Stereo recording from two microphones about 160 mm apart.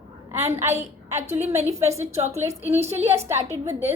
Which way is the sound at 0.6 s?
45° right (ahead or behind).